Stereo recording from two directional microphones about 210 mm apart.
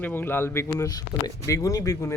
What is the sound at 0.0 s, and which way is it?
Speech, 10° left (ahead or behind).